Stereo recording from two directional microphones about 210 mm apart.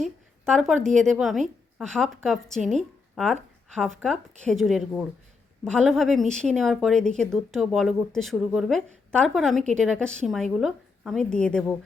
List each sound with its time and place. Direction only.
0.0 s a woman's voice: centre (ahead or behind)